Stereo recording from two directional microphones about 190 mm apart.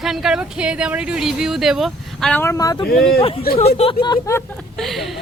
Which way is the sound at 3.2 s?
30° left (ahead or behind).